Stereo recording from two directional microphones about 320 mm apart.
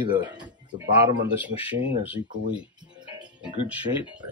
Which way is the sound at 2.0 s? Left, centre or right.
Centre.